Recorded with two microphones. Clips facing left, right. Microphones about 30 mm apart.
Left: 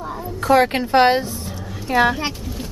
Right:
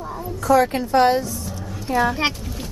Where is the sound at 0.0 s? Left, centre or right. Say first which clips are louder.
Left 2 dB; centre.